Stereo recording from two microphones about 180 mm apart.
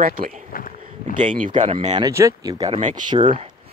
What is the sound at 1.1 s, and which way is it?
Speech, 45° right (ahead or behind).